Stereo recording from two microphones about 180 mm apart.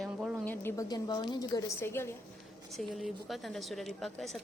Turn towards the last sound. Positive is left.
turn(degrees=0)  # may be behind; listen again after turning